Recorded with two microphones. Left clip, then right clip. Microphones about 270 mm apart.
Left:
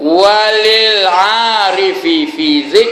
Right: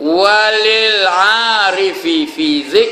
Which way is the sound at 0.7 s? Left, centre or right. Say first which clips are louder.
Left 2 dB; centre.